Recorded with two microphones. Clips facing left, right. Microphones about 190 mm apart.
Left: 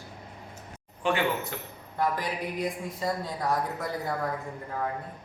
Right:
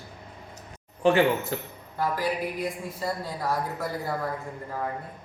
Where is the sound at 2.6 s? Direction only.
5° right (ahead or behind).